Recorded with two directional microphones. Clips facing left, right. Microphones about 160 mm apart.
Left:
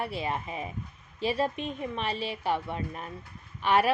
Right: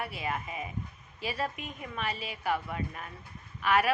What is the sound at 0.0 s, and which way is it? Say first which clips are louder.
A woman's voice: left 3 dB; 30° left (ahead or behind).